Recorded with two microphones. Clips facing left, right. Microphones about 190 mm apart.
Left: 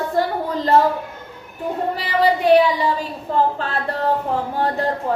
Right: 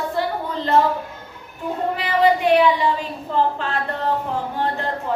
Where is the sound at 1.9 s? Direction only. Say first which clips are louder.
Right 2 dB; 35° left (ahead or behind).